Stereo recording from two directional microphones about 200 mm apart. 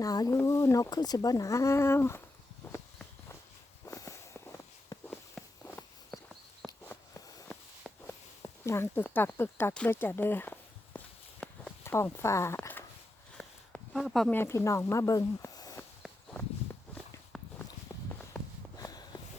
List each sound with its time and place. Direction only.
0.0 s speech: 20° left (ahead or behind)
2.7 s walk: 15° left (ahead or behind)
6.7 s a sound: 15° left (ahead or behind)
13.3 s speech: 5° left (ahead or behind)
16.0 s walk: centre (ahead or behind)
17.3 s walk: 5° left (ahead or behind)
17.9 s a sound: 10° left (ahead or behind)
18.8 s walk: 20° left (ahead or behind)